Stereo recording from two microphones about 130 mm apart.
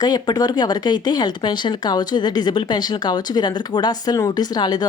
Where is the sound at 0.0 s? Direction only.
30° left (ahead or behind).